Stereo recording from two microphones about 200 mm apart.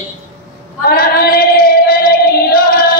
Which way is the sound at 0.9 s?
45° left (ahead or behind).